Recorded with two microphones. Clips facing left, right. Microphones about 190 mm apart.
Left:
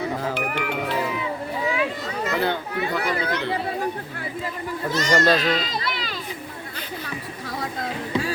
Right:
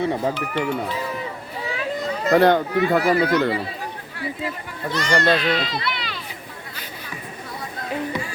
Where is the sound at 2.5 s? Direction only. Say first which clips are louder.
Right 8 dB; 55° right (ahead or behind).